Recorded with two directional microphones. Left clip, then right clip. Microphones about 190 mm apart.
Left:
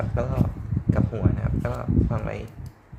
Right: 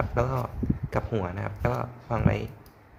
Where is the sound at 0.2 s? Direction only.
20° right (ahead or behind).